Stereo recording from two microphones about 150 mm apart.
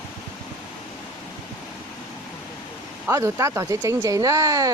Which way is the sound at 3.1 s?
20° right (ahead or behind).